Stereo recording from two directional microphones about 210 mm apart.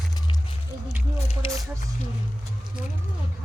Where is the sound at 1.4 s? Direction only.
25° left (ahead or behind).